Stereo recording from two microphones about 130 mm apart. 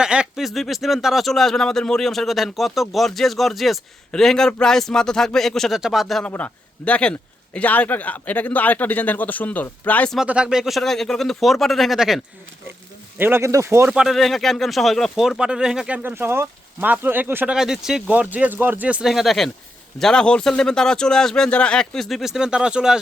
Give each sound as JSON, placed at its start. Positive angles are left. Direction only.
{"t": 0.0, "sound": "a man's voice", "side_deg": -5}
{"t": 10.2, "sound": "speech", "side_deg": -5}
{"t": 13.1, "sound": "speech", "side_deg": -15}
{"t": 13.9, "sound": "speech", "side_deg": -5}
{"t": 16.0, "sound": "speech", "side_deg": -15}